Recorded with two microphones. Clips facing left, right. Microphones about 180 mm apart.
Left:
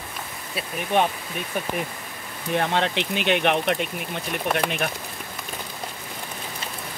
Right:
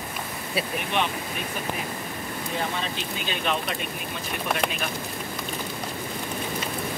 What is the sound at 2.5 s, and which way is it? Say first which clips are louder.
Speech: left 8 dB; 75° left (ahead or behind).